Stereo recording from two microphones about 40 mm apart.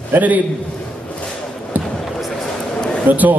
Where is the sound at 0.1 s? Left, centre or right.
Right.